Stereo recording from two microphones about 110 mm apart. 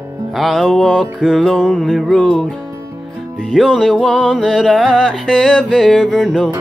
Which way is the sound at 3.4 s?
5° left (ahead or behind).